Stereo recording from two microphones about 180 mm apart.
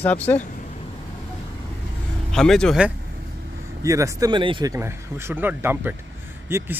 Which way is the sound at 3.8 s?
15° right (ahead or behind).